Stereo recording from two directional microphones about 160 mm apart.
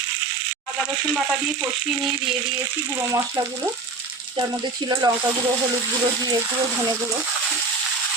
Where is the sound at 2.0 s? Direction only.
Centre (ahead or behind).